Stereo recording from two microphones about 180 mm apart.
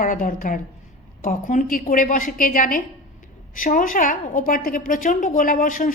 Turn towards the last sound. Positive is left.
turn(degrees=50)  # may be behind; listen again after turning